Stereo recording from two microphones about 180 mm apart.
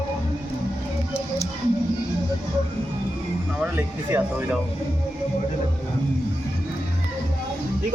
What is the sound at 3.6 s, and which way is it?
Speech, 10° right (ahead or behind).